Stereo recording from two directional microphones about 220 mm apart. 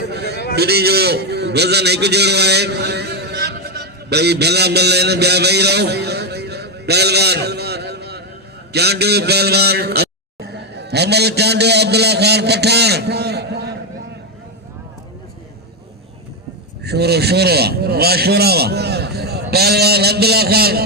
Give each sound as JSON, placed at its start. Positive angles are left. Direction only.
{"t": 0.1, "sound": "a sound", "side_deg": -50}
{"t": 0.5, "sound": "a man's voice", "side_deg": -45}
{"t": 16.8, "sound": "a man's voice", "side_deg": -45}